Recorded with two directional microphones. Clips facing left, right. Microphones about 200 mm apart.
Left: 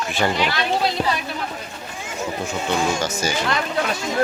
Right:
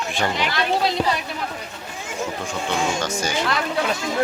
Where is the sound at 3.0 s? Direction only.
5° left (ahead or behind).